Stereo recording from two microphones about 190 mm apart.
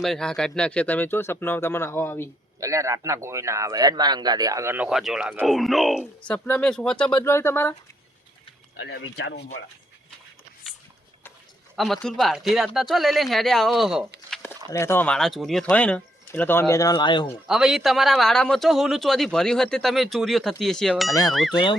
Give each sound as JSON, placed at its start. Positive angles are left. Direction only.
{"t": 0.0, "sound": "speech", "side_deg": 0}
{"t": 2.6, "sound": "a man's voice", "side_deg": -15}
{"t": 8.7, "sound": "speech", "side_deg": 65}
{"t": 11.8, "sound": "a man's voice", "side_deg": 0}
{"t": 14.3, "sound": "a sound", "side_deg": 0}
{"t": 14.7, "sound": "speech", "side_deg": 15}
{"t": 17.5, "sound": "a man's voice", "side_deg": 0}
{"t": 21.1, "sound": "speech", "side_deg": 20}